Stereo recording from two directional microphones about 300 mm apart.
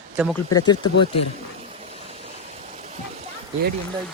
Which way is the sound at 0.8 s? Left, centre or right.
Left.